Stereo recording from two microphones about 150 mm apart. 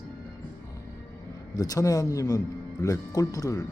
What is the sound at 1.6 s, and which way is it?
Speech, 25° left (ahead or behind).